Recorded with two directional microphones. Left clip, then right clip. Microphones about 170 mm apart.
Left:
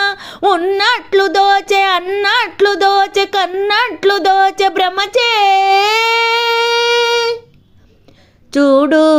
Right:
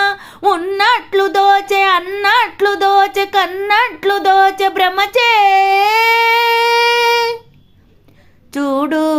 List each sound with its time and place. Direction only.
0.0 s child singing: 30° left (ahead or behind)
3.6 s a child's voice: 20° left (ahead or behind)
8.4 s child singing: 20° left (ahead or behind)